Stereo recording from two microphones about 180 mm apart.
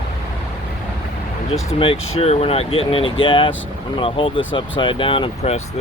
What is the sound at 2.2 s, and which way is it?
Speech, 35° left (ahead or behind).